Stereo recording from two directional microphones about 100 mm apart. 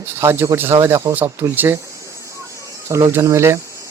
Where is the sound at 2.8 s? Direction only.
30° right (ahead or behind).